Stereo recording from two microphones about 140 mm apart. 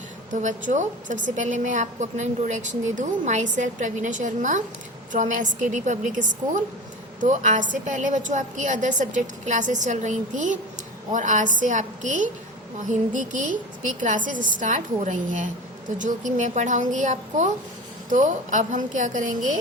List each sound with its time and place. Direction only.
0.3 s a woman's voice: 60° right (ahead or behind)